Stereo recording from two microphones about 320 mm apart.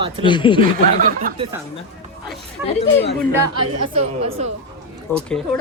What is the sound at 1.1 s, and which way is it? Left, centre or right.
Speech, right.